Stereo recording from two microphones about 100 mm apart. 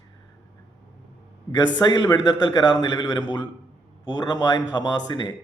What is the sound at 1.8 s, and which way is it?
Speech, 45° left (ahead or behind).